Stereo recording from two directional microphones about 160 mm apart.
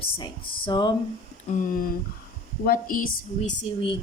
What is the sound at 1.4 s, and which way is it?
A woman's voice, 55° left (ahead or behind).